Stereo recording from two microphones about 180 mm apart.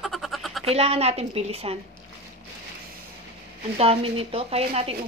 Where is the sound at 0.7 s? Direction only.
35° right (ahead or behind).